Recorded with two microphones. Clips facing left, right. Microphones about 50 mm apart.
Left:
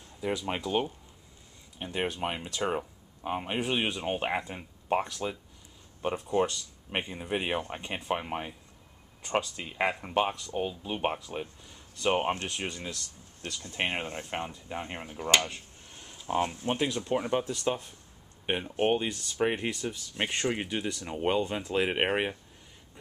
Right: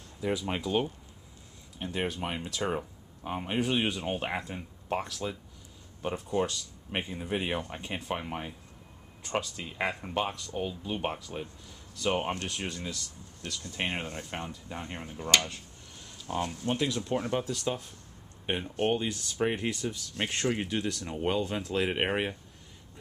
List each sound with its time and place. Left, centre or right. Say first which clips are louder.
0.2 s speech: even; centre
18.8 s speech: left 2 dB; centre
19.1 s speech: left 1 dB; centre